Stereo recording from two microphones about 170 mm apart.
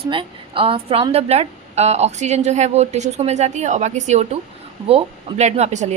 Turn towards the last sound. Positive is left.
turn(degrees=-40)  # may be behind; listen again after turning